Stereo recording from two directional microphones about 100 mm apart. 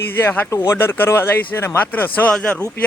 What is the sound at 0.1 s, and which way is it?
A man's voice, 20° left (ahead or behind).